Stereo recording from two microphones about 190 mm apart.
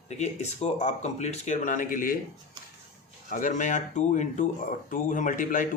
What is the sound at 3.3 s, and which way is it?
Speech, 40° left (ahead or behind).